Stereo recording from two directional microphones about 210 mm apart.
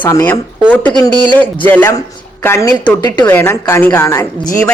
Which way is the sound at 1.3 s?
10° left (ahead or behind).